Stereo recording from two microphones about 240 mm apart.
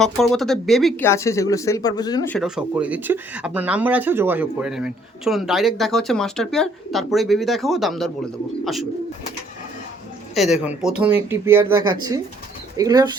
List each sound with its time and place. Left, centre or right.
0.0 s speech: centre
2.3 s speech: centre
10.3 s speech: centre